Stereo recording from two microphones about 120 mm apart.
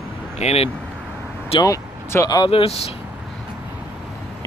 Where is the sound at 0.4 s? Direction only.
60° left (ahead or behind).